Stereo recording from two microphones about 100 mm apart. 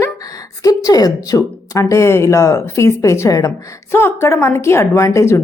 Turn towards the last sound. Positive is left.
turn(degrees=30)  # may be behind; listen again after turning